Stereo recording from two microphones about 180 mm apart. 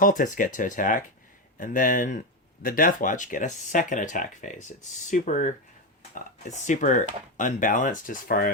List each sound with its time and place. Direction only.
0.0 s speech: 50° left (ahead or behind)